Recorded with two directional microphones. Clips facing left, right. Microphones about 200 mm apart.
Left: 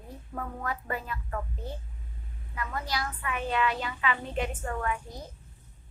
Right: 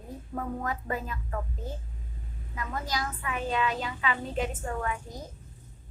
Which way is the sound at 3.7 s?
35° right (ahead or behind).